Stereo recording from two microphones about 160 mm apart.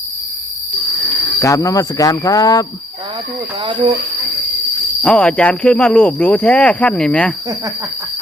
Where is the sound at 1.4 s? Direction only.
20° left (ahead or behind).